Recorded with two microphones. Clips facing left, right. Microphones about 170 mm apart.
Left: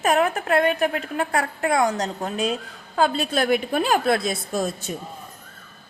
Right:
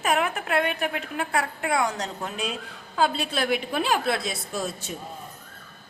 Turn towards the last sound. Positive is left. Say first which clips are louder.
# left 5 dB
turn(degrees=45)  # may be behind; listen again after turning